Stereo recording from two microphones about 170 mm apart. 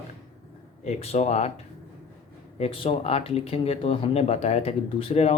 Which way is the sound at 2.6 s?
35° left (ahead or behind).